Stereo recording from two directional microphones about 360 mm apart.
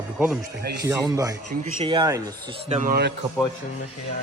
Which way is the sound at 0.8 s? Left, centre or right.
Centre.